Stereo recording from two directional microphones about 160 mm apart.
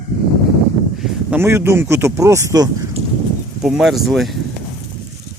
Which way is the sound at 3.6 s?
Centre (ahead or behind).